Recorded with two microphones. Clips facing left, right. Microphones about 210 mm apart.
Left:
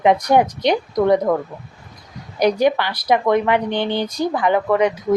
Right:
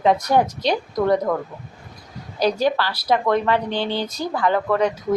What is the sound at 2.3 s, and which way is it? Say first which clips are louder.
A woman's voice: left 3 dB; 15° left (ahead or behind).